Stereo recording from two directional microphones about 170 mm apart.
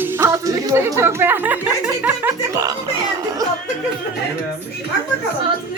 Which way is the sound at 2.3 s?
20° right (ahead or behind).